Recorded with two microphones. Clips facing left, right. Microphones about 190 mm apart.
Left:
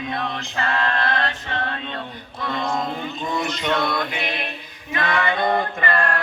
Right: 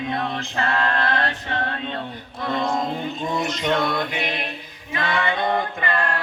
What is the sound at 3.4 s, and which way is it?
Mantra, 45° right (ahead or behind).